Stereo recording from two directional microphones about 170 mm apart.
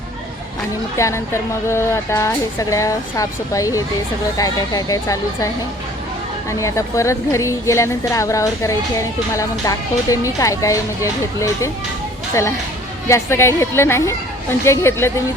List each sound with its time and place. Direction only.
0.9 s speech: 15° left (ahead or behind)
6.5 s speech: 20° left (ahead or behind)